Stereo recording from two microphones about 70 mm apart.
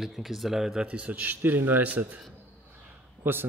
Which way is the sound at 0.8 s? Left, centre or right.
Centre.